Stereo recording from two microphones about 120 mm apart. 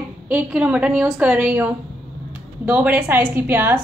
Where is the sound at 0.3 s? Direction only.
10° right (ahead or behind).